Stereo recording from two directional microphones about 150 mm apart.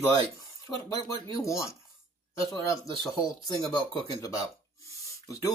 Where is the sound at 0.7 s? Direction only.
10° left (ahead or behind).